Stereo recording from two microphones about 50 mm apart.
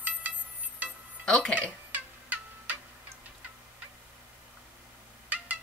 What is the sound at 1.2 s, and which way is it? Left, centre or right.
Music, centre.